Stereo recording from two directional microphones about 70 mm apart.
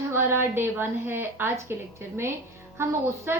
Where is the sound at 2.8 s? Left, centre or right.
Right.